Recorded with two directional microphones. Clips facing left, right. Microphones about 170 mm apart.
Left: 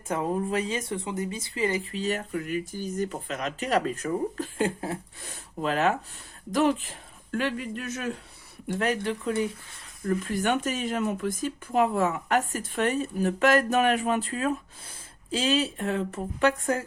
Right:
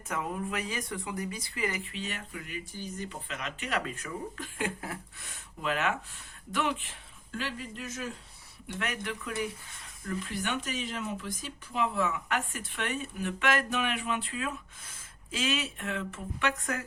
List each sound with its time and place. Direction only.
0.1 s speech: 35° left (ahead or behind)
7.3 s a man's voice: 60° left (ahead or behind)
8.6 s speech: 40° left (ahead or behind)
10.1 s speech: 45° left (ahead or behind)